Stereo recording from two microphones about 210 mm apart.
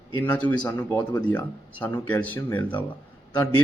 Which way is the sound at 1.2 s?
5° left (ahead or behind).